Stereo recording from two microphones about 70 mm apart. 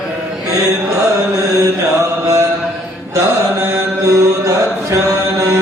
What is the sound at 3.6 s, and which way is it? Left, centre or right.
Mantra, right.